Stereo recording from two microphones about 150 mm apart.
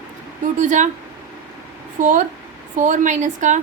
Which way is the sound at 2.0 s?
55° right (ahead or behind).